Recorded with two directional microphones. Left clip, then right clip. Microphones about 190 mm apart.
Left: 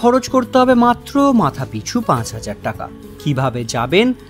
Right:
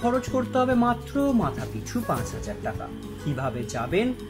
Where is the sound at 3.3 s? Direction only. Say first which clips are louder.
Left 11 dB; 45° left (ahead or behind).